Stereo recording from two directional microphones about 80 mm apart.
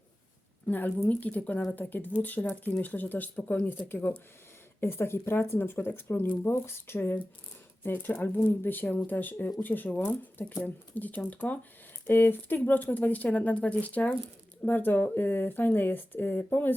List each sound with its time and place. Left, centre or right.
0.7 s speech: left